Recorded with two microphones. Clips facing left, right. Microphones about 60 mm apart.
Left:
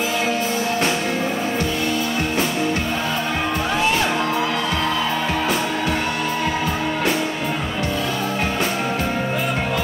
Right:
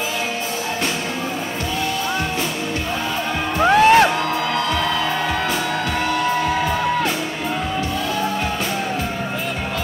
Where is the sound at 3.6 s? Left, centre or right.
Right.